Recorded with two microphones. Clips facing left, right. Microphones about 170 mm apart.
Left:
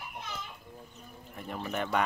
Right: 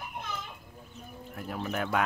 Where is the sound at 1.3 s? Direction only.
Centre (ahead or behind).